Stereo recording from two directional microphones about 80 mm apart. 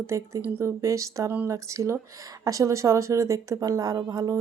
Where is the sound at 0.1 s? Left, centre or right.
Right.